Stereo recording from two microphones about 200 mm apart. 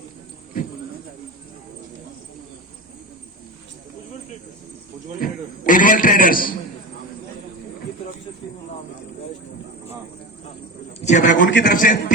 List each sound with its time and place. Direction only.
5.2 s a sound: 40° left (ahead or behind)
11.0 s a man's voice: 35° left (ahead or behind)
11.4 s a man's voice: 65° left (ahead or behind)
11.7 s a man's voice: 40° left (ahead or behind)